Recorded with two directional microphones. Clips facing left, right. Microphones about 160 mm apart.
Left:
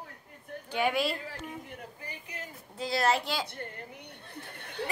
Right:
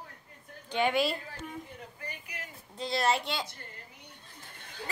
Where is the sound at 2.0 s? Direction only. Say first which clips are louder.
Right 2 dB; 25° left (ahead or behind).